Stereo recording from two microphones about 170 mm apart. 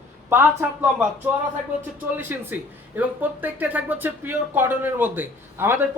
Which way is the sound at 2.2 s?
10° right (ahead or behind).